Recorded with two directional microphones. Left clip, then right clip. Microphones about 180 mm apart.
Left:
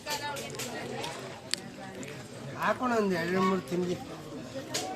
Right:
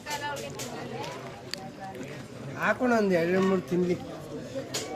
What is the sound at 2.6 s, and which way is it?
Speech, 70° right (ahead or behind).